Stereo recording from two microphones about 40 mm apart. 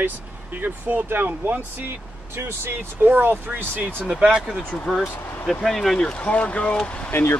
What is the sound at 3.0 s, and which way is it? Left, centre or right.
Speech, right.